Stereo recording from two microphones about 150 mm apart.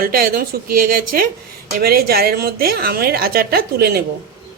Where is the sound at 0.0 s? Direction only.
75° right (ahead or behind).